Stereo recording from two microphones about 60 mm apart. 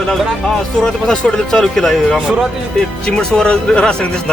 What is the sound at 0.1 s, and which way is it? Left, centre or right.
Speech, centre.